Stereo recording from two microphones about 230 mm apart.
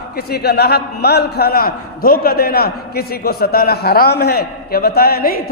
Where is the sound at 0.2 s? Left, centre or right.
Left.